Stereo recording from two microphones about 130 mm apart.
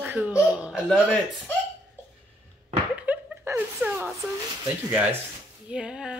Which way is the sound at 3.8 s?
10° right (ahead or behind).